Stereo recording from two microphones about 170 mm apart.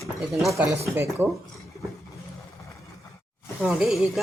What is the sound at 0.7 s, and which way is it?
Speech, 15° right (ahead or behind).